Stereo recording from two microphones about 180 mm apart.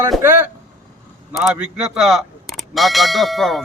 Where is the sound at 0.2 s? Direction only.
10° right (ahead or behind).